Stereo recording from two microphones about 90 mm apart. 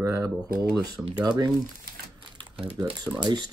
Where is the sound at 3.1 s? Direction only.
40° right (ahead or behind).